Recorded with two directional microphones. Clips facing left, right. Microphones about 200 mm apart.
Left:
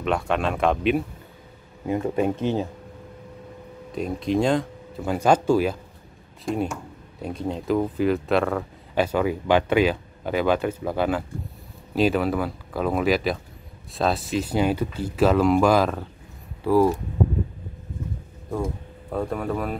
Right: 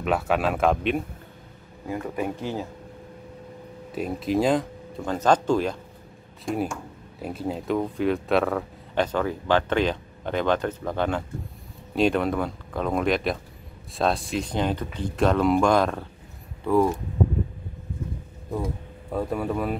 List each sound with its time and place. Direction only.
0.0 s speech: 5° right (ahead or behind)
1.9 s speech: 20° left (ahead or behind)
3.9 s speech: centre (ahead or behind)
19.1 s speech: 5° right (ahead or behind)